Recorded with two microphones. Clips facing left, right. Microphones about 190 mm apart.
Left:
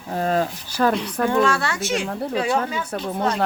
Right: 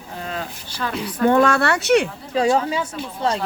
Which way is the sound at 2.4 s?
30° right (ahead or behind).